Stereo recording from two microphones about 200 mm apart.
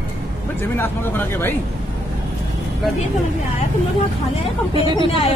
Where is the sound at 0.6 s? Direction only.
10° left (ahead or behind).